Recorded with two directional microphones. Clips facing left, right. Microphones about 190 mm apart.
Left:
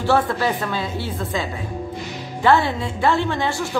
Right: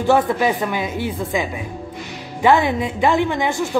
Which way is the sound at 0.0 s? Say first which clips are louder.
Right 3 dB; 15° right (ahead or behind).